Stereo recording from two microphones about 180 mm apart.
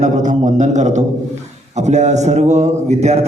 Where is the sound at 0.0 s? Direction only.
45° right (ahead or behind).